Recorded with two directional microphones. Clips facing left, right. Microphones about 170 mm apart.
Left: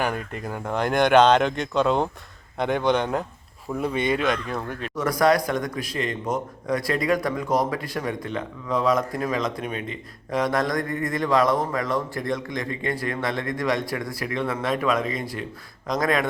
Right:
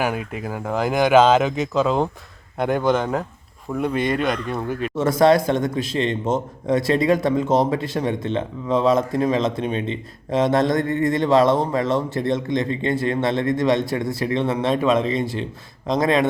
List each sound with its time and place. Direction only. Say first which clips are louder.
0.0 s speech: right 3 dB; 5° right (ahead or behind)
4.9 s a man's voice: right 4 dB; 25° right (ahead or behind)